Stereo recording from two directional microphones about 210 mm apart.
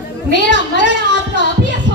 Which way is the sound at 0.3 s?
60° left (ahead or behind).